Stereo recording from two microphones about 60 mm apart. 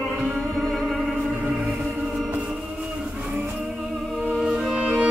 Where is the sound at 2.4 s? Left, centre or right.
Centre.